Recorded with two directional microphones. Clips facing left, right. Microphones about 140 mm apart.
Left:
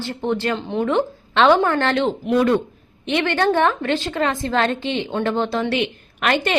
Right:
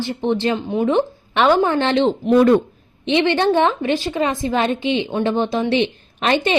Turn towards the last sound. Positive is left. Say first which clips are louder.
# right 2 dB
turn(degrees=-20)  # may be behind; listen again after turning